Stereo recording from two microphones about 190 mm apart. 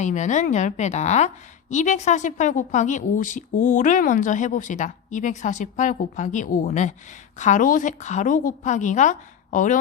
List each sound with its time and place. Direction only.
0.0 s a woman's voice: 40° left (ahead or behind)